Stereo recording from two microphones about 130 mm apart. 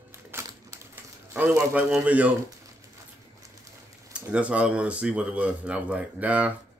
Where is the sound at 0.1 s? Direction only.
20° right (ahead or behind).